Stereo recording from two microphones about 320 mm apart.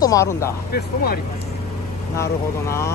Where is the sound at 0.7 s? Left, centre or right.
Left.